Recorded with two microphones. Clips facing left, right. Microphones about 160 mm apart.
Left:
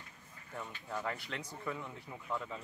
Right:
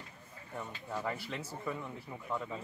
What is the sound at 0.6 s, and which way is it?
Speech, 5° right (ahead or behind).